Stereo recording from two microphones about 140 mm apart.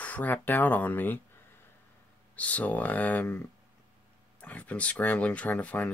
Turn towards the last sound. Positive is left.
turn(degrees=10)  # may be behind; listen again after turning